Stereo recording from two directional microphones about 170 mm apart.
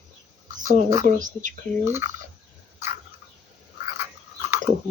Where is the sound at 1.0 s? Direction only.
50° right (ahead or behind).